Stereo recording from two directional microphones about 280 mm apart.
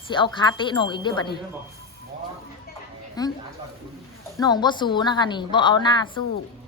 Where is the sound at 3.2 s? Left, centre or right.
Centre.